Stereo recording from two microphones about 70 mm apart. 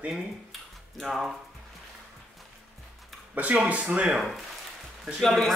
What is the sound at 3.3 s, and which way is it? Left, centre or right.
Speech, right.